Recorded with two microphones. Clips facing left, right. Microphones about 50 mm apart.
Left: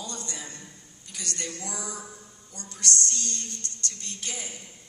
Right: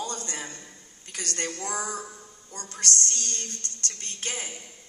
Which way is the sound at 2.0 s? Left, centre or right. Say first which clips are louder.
Right 2 dB; right.